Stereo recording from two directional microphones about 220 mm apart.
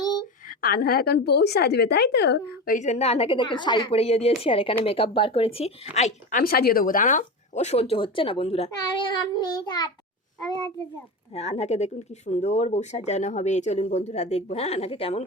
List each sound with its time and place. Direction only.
0.4 s a woman's voice: 40° left (ahead or behind)
2.7 s speech: 30° left (ahead or behind)
11.3 s speech: 30° left (ahead or behind)